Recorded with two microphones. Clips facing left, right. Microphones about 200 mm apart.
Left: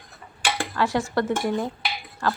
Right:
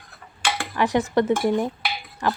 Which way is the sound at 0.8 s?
20° right (ahead or behind).